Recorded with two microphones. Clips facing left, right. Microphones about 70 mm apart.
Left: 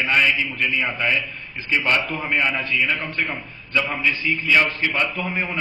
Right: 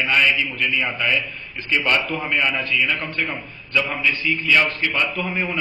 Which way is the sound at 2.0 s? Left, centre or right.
Centre.